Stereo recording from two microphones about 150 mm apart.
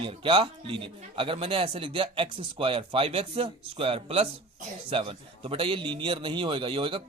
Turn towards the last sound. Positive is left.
turn(degrees=-35)  # may be behind; listen again after turning